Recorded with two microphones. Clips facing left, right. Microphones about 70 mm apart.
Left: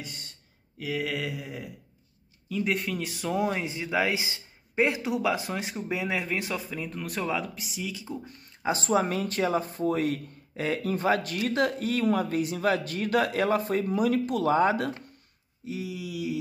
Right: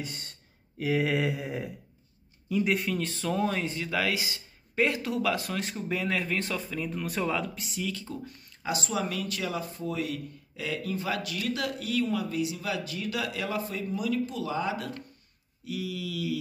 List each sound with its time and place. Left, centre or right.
0.7 s a sound: right
2.5 s speech: centre
8.6 s a woman's voice: left
15.6 s speech: left